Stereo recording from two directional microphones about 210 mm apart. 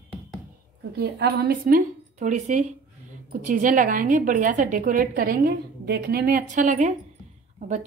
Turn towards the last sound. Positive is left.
turn(degrees=-35)  # may be behind; listen again after turning